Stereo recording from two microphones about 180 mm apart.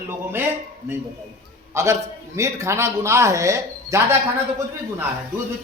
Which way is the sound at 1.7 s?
15° right (ahead or behind).